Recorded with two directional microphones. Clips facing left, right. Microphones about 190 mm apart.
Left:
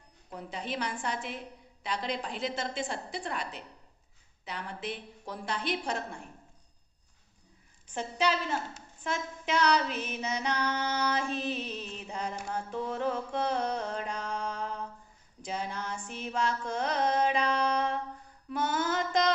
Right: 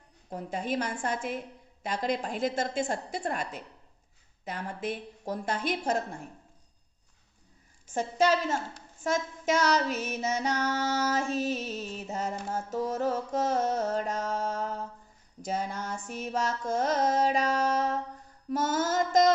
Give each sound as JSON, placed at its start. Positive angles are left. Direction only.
{"t": 0.3, "sound": "music", "side_deg": -45}
{"t": 7.9, "sound": "music", "side_deg": -45}
{"t": 11.9, "sound": "mantra", "side_deg": -45}
{"t": 15.4, "sound": "music", "side_deg": -45}